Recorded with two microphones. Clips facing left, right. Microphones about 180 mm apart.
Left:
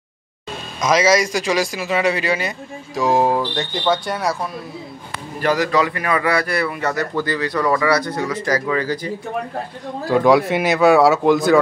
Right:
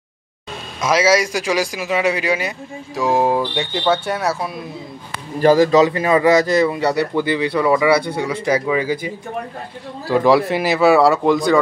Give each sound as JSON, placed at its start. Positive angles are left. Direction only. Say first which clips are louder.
{"t": 0.7, "sound": "a man's voice", "louder": "even", "side_deg": -10}
{"t": 5.4, "sound": "a man's voice", "louder": "right 6 dB", "side_deg": -30}